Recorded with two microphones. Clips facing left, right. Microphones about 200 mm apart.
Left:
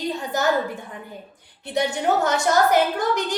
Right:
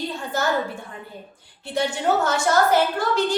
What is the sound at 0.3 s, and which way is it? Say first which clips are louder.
Speech: left 1 dB; 15° left (ahead or behind).